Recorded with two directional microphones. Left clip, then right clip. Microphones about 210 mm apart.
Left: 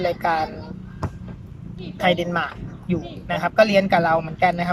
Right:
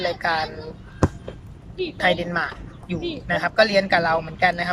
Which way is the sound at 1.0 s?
50° right (ahead or behind).